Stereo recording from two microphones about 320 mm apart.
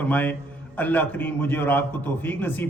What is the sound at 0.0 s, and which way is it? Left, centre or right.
A man's voice, centre.